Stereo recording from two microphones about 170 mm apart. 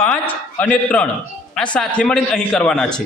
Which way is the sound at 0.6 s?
5° left (ahead or behind).